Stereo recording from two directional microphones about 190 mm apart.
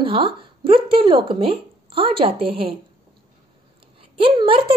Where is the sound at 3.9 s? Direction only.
30° right (ahead or behind).